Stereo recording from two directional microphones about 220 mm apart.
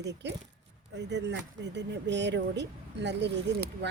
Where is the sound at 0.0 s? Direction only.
50° right (ahead or behind).